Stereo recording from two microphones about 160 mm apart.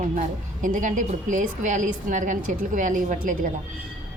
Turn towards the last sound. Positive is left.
turn(degrees=-55)  # may be behind; listen again after turning